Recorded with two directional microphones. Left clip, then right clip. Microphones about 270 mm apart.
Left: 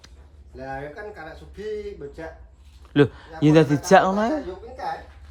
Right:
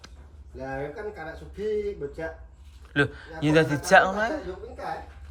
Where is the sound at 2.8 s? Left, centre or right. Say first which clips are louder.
Left 5 dB; left.